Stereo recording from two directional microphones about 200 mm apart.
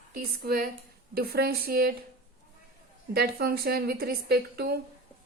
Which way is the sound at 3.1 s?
50° right (ahead or behind).